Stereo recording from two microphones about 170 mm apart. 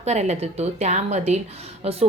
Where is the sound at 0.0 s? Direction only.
40° right (ahead or behind).